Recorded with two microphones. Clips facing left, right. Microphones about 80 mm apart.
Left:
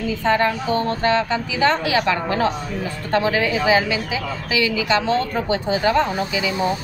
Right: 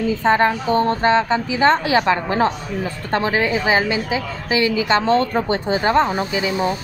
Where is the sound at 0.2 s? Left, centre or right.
Right.